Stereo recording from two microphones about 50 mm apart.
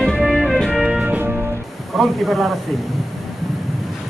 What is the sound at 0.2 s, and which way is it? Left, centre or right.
Music, centre.